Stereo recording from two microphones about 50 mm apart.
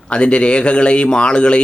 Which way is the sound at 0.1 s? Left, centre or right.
Left.